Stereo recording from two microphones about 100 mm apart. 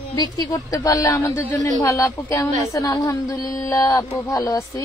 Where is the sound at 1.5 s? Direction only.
35° left (ahead or behind).